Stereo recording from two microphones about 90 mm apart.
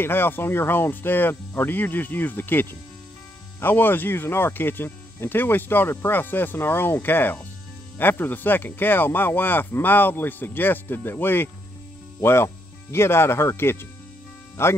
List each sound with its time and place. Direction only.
0.0 s speech: 25° left (ahead or behind)